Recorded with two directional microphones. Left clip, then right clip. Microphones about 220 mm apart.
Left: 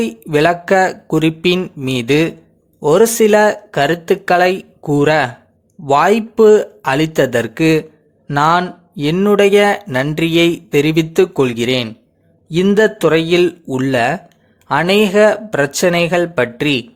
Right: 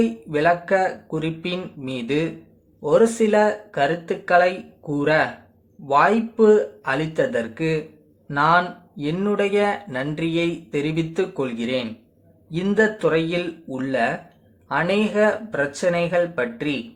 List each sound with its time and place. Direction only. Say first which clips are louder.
0.0 s speech: left 6 dB; 45° left (ahead or behind)